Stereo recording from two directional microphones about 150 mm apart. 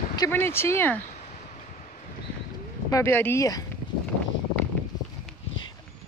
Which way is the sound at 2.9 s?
20° left (ahead or behind).